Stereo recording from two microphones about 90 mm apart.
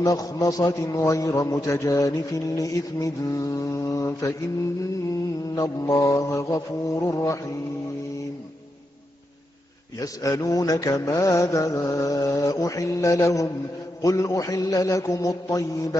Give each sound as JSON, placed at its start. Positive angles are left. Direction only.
{"t": 0.0, "sound": "mantra", "side_deg": 40}
{"t": 5.5, "sound": "mantra", "side_deg": 40}
{"t": 9.9, "sound": "mantra", "side_deg": 40}